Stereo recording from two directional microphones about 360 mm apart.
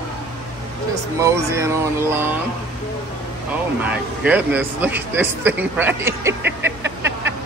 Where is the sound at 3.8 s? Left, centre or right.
Centre.